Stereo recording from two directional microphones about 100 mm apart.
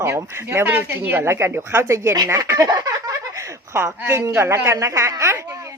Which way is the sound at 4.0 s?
25° right (ahead or behind).